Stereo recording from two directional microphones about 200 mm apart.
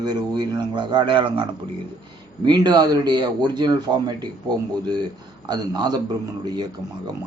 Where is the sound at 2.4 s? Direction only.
20° right (ahead or behind).